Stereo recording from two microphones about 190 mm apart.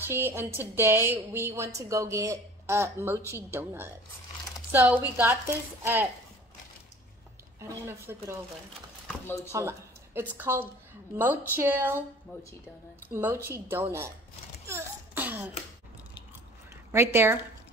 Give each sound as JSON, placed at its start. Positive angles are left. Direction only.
{"t": 0.0, "sound": "a woman's voice", "side_deg": -10}
{"t": 7.6, "sound": "a woman's voice", "side_deg": -15}
{"t": 9.5, "sound": "a woman's voice", "side_deg": -15}
{"t": 13.1, "sound": "a woman's voice", "side_deg": -15}
{"t": 14.7, "sound": "a sound", "side_deg": -10}
{"t": 16.9, "sound": "a woman's voice", "side_deg": -15}